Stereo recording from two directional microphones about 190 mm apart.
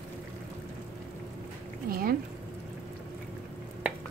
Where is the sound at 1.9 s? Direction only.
50° right (ahead or behind).